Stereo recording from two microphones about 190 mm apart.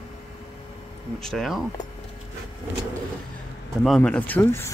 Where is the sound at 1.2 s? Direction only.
Centre (ahead or behind).